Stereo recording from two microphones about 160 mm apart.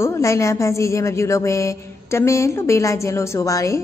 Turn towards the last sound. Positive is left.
turn(degrees=20)  # may be behind; listen again after turning